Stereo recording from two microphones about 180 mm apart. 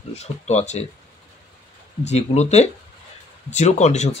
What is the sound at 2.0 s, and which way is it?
Speech, 35° left (ahead or behind).